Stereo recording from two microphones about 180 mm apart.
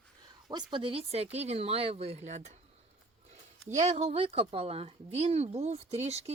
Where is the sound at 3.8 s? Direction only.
40° right (ahead or behind).